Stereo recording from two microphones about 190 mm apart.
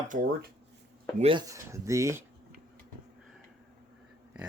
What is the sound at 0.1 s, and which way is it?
Speech, 45° right (ahead or behind).